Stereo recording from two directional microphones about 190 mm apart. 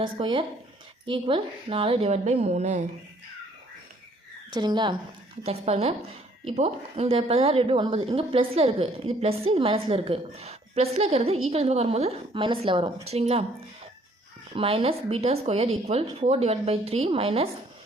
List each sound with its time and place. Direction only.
0.0 s a woman's voice: 25° right (ahead or behind)
4.5 s a woman's voice: 25° right (ahead or behind)
5.4 s a woman's voice: 35° right (ahead or behind)
14.5 s a woman's voice: 30° right (ahead or behind)